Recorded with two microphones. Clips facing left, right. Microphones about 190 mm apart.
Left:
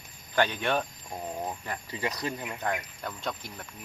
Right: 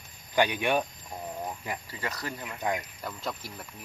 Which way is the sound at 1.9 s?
20° left (ahead or behind).